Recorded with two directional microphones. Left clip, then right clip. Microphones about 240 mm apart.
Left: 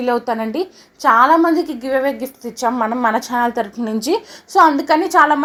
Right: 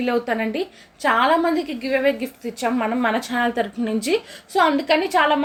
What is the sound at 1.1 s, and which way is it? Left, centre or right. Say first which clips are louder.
Speech: left 6 dB; left.